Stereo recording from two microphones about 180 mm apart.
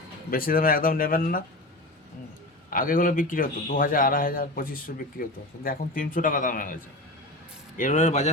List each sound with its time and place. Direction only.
0.3 s a man's voice: 50° left (ahead or behind)
2.6 s a man's voice: 50° left (ahead or behind)
7.8 s a man's voice: 45° left (ahead or behind)